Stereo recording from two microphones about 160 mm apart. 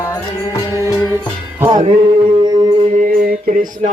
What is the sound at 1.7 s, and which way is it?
Music, 25° right (ahead or behind).